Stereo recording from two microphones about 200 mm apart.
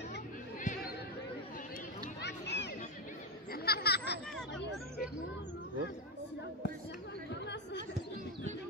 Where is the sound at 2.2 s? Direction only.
60° left (ahead or behind).